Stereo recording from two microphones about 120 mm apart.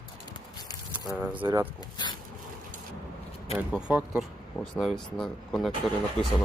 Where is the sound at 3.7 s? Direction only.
10° right (ahead or behind).